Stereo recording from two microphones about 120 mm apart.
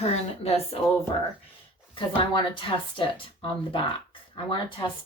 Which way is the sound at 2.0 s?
40° left (ahead or behind).